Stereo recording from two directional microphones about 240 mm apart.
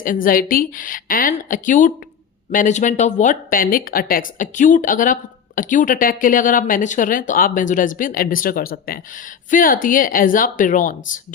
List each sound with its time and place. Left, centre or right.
0.0 s speech: left